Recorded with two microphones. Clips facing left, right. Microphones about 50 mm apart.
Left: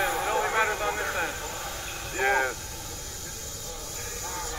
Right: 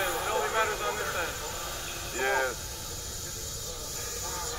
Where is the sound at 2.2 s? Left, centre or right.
Left.